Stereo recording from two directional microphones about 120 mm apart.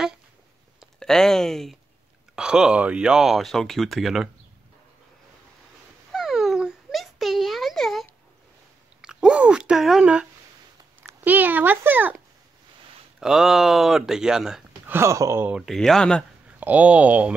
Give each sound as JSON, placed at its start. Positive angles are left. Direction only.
{"t": 0.7, "sound": "speech", "side_deg": 5}
{"t": 6.1, "sound": "a sound", "side_deg": 0}
{"t": 11.0, "sound": "speech", "side_deg": -15}
{"t": 13.2, "sound": "speech", "side_deg": -5}
{"t": 14.9, "sound": "speech", "side_deg": -20}
{"t": 15.5, "sound": "speech", "side_deg": 0}
{"t": 16.4, "sound": "speech", "side_deg": -10}